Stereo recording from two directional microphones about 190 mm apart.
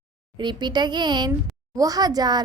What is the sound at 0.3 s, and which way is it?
A woman's voice, 25° right (ahead or behind).